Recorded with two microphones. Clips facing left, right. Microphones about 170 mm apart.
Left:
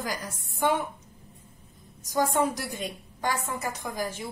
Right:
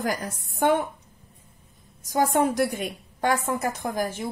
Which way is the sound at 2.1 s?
55° right (ahead or behind).